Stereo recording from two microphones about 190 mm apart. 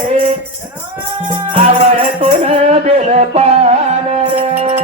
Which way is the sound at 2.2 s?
35° right (ahead or behind).